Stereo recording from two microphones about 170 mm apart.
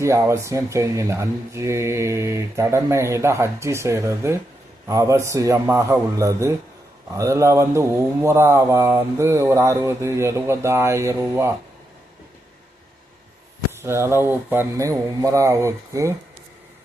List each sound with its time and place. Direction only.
0.0 s speech: 15° right (ahead or behind)
13.7 s speech: 15° right (ahead or behind)